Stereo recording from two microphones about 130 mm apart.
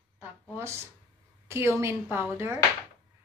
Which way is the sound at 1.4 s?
20° right (ahead or behind).